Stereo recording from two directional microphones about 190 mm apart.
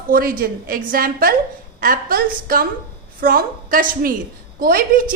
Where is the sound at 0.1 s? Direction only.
50° right (ahead or behind).